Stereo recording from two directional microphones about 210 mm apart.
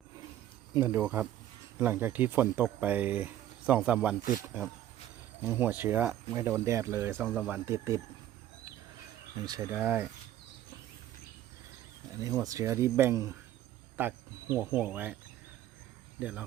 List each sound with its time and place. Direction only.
0.7 s speech: 10° right (ahead or behind)
4.2 s speech: 40° left (ahead or behind)
5.4 s speech: 10° right (ahead or behind)
9.7 s speech: 10° right (ahead or behind)
12.2 s speech: 15° right (ahead or behind)